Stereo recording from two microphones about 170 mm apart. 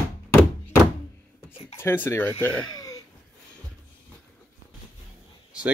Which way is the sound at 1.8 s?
15° left (ahead or behind).